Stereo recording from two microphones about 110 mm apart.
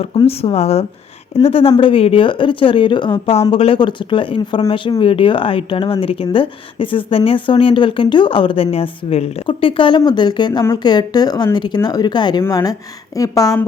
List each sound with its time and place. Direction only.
0.3 s speech: 70° left (ahead or behind)
1.5 s speech: 60° left (ahead or behind)
3.5 s speech: 55° left (ahead or behind)
10.0 s a woman's voice: 40° left (ahead or behind)
12.4 s a woman's voice: 30° left (ahead or behind)